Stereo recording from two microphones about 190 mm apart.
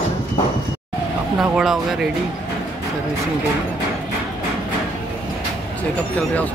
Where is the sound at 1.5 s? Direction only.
5° right (ahead or behind).